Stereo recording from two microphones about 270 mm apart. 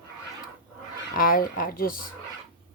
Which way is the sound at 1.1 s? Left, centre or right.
Left.